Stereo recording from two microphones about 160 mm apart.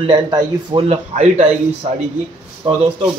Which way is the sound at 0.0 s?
30° right (ahead or behind).